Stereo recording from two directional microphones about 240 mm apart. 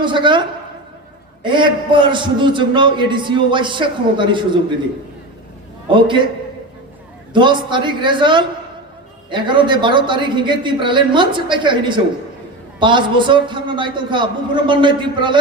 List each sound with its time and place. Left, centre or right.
0.0 s a man's voice: centre
5.9 s a man's voice: centre
7.3 s a man's voice: centre